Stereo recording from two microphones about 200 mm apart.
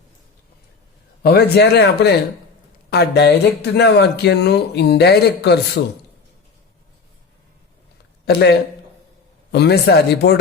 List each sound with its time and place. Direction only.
1.2 s speech: 50° left (ahead or behind)
8.2 s speech: 55° left (ahead or behind)